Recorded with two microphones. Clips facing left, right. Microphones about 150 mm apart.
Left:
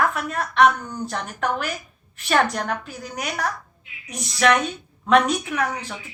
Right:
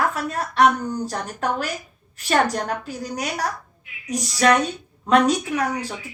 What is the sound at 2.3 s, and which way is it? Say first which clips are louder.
A woman's voice: right 1 dB; 35° right (ahead or behind).